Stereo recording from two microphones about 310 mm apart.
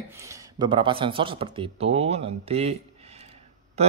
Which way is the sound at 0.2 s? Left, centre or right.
Centre.